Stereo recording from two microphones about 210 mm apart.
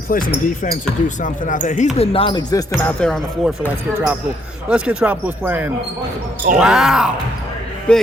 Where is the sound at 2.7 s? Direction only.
5° left (ahead or behind).